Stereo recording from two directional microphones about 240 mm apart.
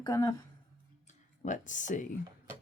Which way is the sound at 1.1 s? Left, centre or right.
Left.